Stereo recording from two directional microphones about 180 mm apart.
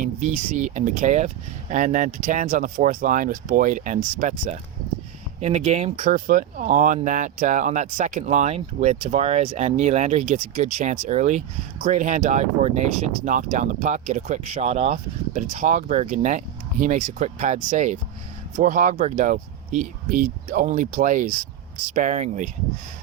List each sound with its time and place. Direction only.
0.0 s speech: 45° right (ahead or behind)